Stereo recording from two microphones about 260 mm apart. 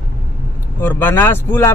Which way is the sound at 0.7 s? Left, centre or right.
Centre.